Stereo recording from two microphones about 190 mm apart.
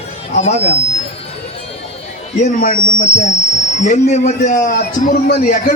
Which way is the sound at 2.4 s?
40° left (ahead or behind).